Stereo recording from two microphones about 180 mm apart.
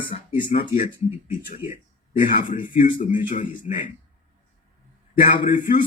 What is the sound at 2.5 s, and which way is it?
A man's voice, 50° left (ahead or behind).